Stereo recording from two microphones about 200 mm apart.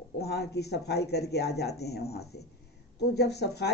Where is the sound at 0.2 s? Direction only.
55° left (ahead or behind).